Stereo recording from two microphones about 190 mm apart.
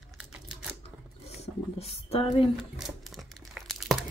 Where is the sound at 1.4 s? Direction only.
30° left (ahead or behind).